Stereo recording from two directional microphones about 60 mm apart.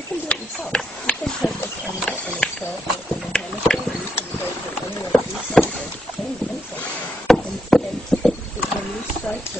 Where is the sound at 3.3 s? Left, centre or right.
Centre.